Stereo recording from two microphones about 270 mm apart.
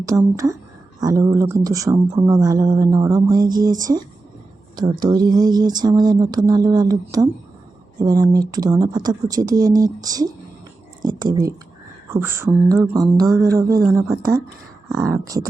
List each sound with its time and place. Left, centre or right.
0.0 s speech: centre
4.8 s speech: centre